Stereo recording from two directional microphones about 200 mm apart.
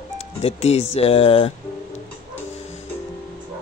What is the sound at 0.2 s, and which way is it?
Speech, 30° left (ahead or behind).